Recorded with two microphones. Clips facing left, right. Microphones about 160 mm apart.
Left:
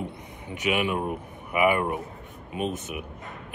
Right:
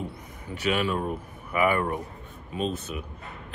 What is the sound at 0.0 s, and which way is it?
Speech, 20° left (ahead or behind).